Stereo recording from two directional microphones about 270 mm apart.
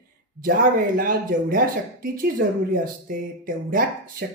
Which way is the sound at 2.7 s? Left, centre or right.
Right.